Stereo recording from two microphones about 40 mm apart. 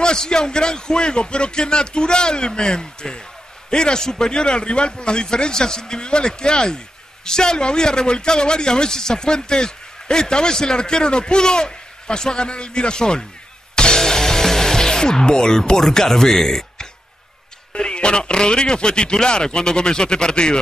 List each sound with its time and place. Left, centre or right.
0.0 s a man's voice: centre
13.7 s music: centre
17.7 s a man's voice: left